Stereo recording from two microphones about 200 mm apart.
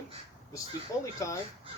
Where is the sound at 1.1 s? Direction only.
15° left (ahead or behind).